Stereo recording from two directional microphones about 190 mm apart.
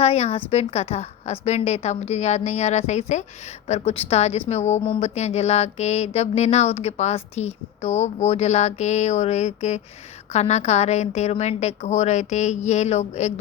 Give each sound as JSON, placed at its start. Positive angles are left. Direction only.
{"t": 0.0, "sound": "mantra", "side_deg": 35}